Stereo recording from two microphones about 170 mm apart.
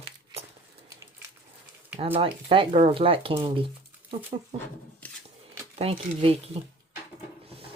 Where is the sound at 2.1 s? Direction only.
30° right (ahead or behind).